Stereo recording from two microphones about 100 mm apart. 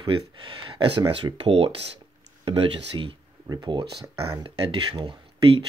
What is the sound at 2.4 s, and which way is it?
Speech, 60° right (ahead or behind).